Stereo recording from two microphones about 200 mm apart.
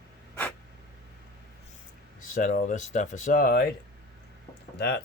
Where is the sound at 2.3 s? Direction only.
45° left (ahead or behind).